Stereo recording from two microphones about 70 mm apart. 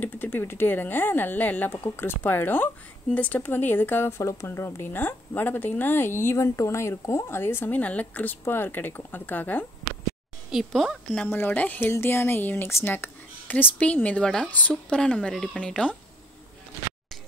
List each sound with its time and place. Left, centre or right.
0.0 s speech: left
4.2 s speech: left
4.5 s a woman's voice: left
10.5 s speech: centre
11.2 s speech: left
11.8 s a woman's voice: left; by 16.0 s centre